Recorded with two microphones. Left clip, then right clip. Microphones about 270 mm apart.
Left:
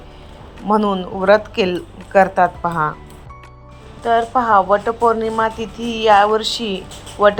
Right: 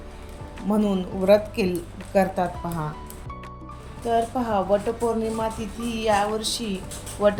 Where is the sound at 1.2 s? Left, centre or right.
Left.